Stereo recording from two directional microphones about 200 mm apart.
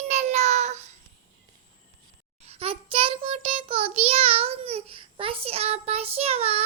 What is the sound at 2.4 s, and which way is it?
Child singing, 30° right (ahead or behind).